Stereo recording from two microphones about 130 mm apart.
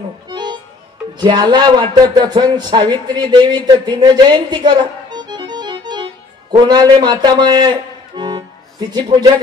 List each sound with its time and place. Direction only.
0.3 s music: 35° right (ahead or behind)
1.1 s a man's voice: 35° right (ahead or behind)
8.2 s music: 30° right (ahead or behind)